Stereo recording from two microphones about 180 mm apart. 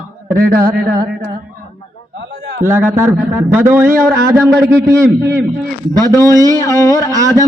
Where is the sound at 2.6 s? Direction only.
15° right (ahead or behind).